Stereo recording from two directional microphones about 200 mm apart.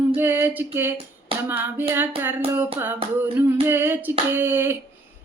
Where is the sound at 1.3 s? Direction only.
25° right (ahead or behind).